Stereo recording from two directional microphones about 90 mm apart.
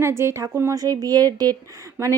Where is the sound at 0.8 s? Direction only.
45° right (ahead or behind).